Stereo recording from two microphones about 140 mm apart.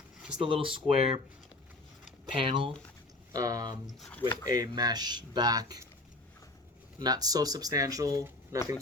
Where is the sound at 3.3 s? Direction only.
25° right (ahead or behind).